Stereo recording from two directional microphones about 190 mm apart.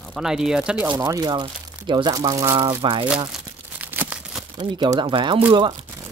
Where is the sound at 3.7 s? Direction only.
10° right (ahead or behind).